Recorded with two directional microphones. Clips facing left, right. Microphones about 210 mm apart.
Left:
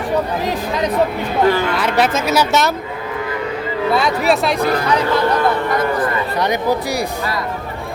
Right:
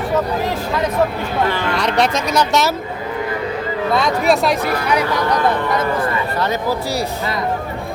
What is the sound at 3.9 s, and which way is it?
Speech, 5° left (ahead or behind).